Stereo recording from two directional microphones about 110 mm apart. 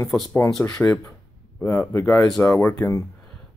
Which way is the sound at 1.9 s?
20° left (ahead or behind).